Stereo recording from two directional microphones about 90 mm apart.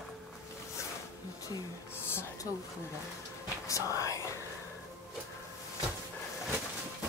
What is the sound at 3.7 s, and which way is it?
Speech, 35° left (ahead or behind).